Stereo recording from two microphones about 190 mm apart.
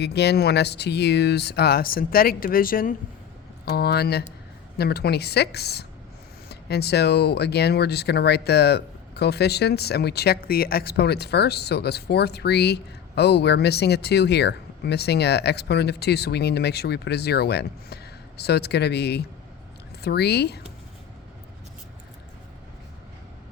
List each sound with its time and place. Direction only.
0.0 s speech: 60° left (ahead or behind)